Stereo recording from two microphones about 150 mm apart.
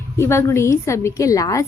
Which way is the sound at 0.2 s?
15° left (ahead or behind).